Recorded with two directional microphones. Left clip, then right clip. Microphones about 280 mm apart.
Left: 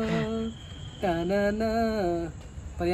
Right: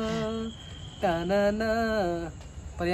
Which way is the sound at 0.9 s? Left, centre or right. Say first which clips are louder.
Right 1 dB; centre.